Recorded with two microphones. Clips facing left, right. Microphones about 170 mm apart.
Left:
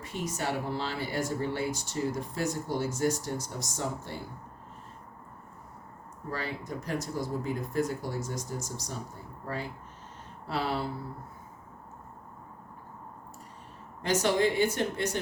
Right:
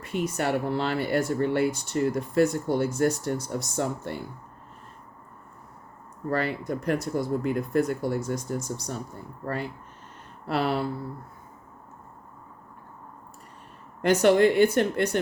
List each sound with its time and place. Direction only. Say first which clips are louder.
0.0 s speech: right 6 dB; 60° right (ahead or behind)
6.3 s speech: right 8 dB; 65° right (ahead or behind)
10.4 s speech: right 5 dB; 60° right (ahead or behind)
14.0 s speech: right 7 dB; 60° right (ahead or behind)